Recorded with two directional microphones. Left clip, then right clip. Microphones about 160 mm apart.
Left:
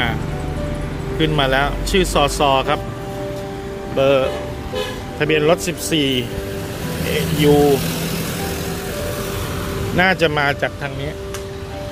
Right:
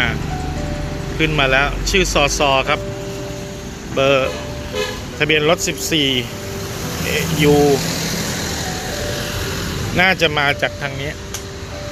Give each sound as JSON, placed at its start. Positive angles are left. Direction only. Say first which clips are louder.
{"t": 1.2, "sound": "speech", "louder": "right 2 dB", "side_deg": 30}
{"t": 3.9, "sound": "speech", "louder": "even", "side_deg": 15}
{"t": 9.9, "sound": "speech", "louder": "right 1 dB", "side_deg": 25}